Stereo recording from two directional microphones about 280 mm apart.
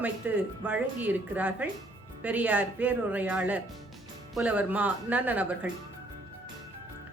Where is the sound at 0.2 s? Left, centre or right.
Centre.